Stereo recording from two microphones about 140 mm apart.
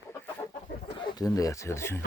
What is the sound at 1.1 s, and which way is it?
Speech, 25° left (ahead or behind).